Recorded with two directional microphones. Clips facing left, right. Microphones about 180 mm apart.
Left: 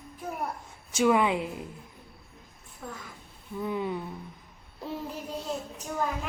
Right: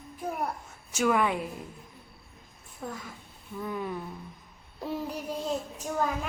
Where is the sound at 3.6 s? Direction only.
20° left (ahead or behind).